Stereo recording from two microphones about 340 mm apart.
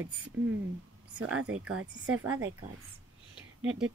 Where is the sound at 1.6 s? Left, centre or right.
Right.